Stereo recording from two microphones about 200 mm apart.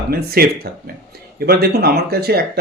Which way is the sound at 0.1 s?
50° right (ahead or behind).